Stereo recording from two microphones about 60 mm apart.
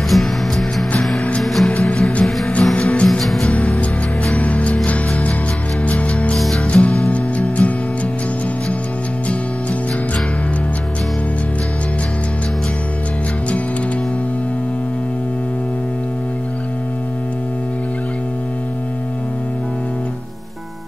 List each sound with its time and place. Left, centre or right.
0.1 s music: centre
1.7 s music: centre
4.4 s music: left
6.3 s music: centre
6.6 s music: left